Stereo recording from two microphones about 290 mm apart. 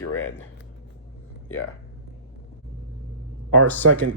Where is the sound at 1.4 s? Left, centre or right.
Left.